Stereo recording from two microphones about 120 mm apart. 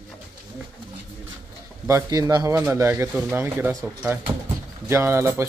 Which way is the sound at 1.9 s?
25° right (ahead or behind).